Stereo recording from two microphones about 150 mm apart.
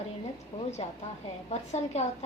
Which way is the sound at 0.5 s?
45° left (ahead or behind).